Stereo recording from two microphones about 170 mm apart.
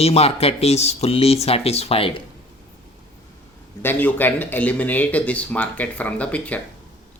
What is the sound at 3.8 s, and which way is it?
Speech, 10° left (ahead or behind).